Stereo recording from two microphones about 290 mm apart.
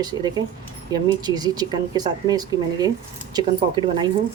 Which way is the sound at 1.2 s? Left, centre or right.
Centre.